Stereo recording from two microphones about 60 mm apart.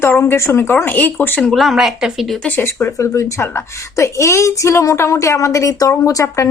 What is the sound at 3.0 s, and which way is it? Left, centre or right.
A woman's voice, left.